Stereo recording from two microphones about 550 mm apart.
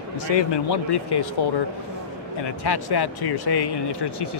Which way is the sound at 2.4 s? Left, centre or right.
Left.